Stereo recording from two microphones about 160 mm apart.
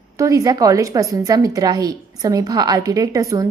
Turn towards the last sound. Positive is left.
turn(degrees=-20)  # may be behind; listen again after turning